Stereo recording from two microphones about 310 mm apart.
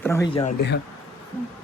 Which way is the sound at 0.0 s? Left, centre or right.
Centre.